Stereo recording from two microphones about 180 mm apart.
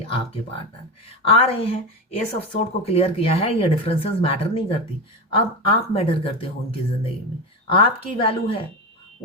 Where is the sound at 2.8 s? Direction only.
35° left (ahead or behind).